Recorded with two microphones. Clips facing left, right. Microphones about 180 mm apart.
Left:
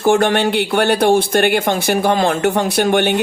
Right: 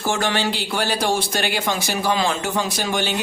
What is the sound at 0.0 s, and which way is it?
Speech, 55° left (ahead or behind).